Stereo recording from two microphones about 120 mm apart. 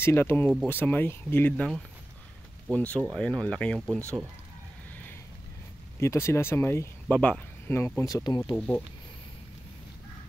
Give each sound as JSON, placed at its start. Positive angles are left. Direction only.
{"t": 0.0, "sound": "speech", "side_deg": 20}
{"t": 2.7, "sound": "speech", "side_deg": 10}
{"t": 4.0, "sound": "speech", "side_deg": -25}
{"t": 5.9, "sound": "speech", "side_deg": 25}
{"t": 8.1, "sound": "speech", "side_deg": 35}
{"t": 8.5, "sound": "speech", "side_deg": 10}